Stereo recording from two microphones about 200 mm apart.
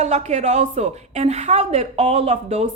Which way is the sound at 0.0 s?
35° right (ahead or behind).